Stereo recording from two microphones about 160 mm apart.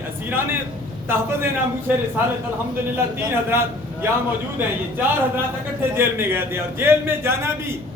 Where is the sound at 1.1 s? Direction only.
15° right (ahead or behind).